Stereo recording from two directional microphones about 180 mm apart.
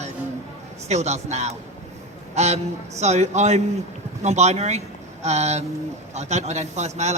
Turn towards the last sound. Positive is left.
turn(degrees=-40)  # may be behind; listen again after turning